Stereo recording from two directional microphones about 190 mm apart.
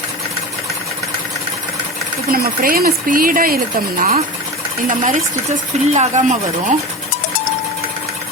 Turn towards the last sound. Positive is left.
turn(degrees=-40)  # may be behind; listen again after turning